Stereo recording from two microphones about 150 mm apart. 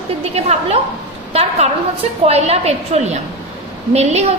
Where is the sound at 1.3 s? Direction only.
45° right (ahead or behind).